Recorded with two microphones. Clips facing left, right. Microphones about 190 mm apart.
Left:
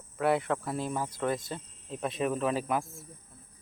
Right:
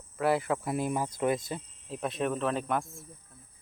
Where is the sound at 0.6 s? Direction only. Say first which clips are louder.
Right 2 dB; 15° right (ahead or behind); by 3.1 s centre (ahead or behind).